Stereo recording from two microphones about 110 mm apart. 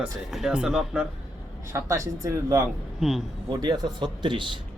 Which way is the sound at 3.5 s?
35° right (ahead or behind).